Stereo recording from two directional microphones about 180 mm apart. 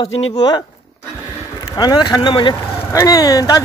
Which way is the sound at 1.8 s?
25° left (ahead or behind).